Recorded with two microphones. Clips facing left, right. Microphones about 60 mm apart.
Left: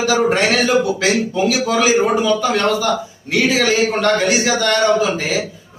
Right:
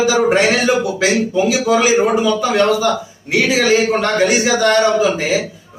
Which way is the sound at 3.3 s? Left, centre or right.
Centre.